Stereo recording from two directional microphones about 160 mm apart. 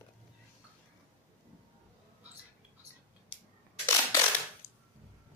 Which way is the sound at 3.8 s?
15° left (ahead or behind).